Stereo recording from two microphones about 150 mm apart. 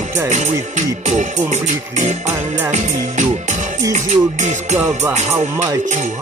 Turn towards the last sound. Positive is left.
turn(degrees=-50)  # may be behind; listen again after turning